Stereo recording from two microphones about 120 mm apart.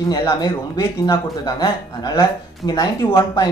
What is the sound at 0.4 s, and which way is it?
A man's voice, 35° left (ahead or behind).